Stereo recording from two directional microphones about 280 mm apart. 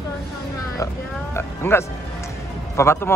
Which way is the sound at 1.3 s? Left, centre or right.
Centre.